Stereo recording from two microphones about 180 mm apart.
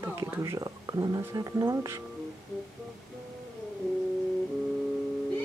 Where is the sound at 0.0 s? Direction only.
15° right (ahead or behind).